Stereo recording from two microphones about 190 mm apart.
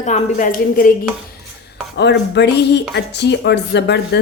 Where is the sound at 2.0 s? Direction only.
65° left (ahead or behind).